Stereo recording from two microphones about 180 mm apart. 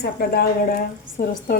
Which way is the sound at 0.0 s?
60° left (ahead or behind).